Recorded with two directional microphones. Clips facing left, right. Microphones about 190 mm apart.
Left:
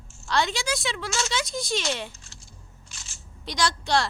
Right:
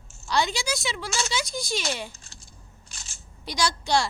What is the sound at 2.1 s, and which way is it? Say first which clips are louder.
Keys jangling: even; 35° right (ahead or behind).